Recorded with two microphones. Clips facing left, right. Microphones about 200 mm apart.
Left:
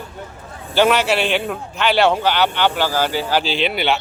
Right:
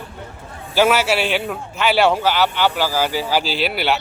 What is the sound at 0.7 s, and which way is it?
A man's voice, 5° right (ahead or behind).